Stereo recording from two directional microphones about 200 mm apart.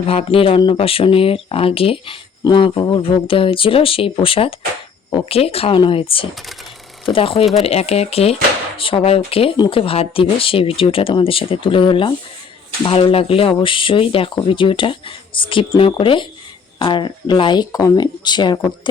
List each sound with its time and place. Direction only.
0.0 s speech: 30° left (ahead or behind)